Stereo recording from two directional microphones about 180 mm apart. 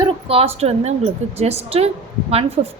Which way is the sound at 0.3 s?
35° right (ahead or behind).